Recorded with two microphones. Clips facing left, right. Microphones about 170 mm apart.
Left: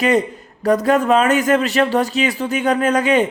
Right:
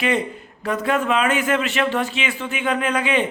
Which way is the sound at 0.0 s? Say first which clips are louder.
Left 5 dB; 40° left (ahead or behind).